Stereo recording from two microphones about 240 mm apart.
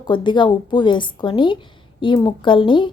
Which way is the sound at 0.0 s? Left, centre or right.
Centre.